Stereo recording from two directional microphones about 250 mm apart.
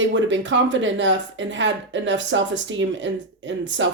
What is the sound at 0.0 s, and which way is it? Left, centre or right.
Speech, right.